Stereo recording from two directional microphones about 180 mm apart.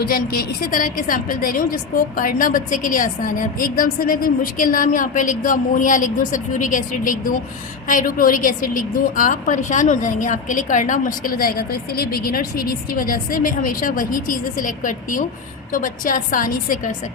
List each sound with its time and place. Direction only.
0.0 s a woman's voice: 55° left (ahead or behind)